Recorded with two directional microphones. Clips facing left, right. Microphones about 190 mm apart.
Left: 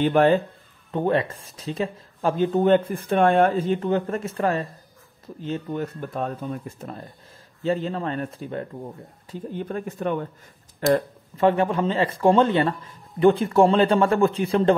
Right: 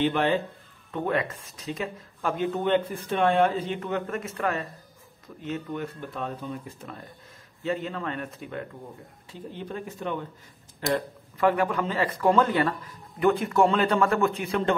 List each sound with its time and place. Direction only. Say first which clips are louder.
0.0 s speech: left 6 dB; 45° left (ahead or behind)
0.9 s speech: left 5 dB; 30° left (ahead or behind)
5.9 s speech: left 5 dB; 45° left (ahead or behind)
7.6 s speech: left 5 dB; 30° left (ahead or behind)
9.3 s speech: left 6 dB; 50° left (ahead or behind)
11.3 s a man's voice: left 4 dB; 25° left (ahead or behind)